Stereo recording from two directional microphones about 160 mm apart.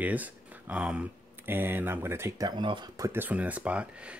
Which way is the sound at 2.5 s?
30° right (ahead or behind).